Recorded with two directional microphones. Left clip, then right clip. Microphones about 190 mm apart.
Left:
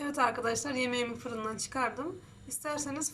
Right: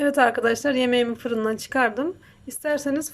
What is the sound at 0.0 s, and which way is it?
A woman's voice, 40° right (ahead or behind).